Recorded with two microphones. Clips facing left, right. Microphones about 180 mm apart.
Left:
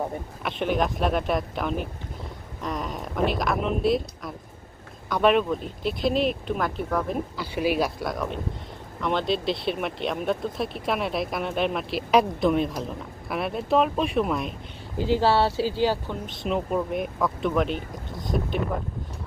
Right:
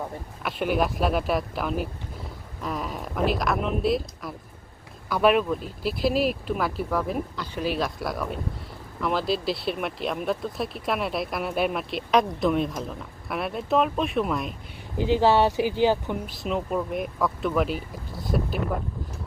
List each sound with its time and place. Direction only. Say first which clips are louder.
0.4 s speech: even; 5° right (ahead or behind)
7.5 s speech: left 3 dB; 10° left (ahead or behind)
9.0 s speech: even; 5° right (ahead or behind)
14.9 s speech: right 1 dB; 20° right (ahead or behind)
16.4 s speech: left 3 dB; centre (ahead or behind)